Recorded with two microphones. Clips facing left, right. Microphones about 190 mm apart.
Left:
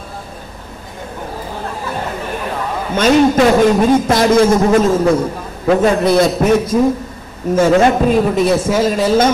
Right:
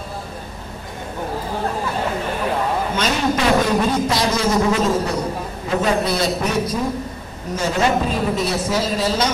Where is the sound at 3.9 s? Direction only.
50° left (ahead or behind).